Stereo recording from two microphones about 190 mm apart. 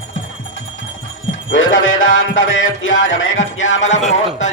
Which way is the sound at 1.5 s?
90° left.